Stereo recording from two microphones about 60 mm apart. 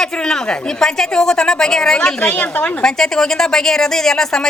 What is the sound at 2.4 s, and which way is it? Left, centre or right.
Speech, left.